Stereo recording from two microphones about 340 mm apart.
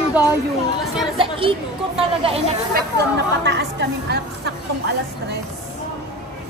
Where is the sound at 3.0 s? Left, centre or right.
Right.